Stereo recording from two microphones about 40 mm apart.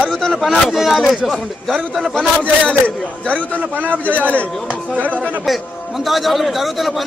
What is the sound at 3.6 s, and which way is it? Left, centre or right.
Speech, right.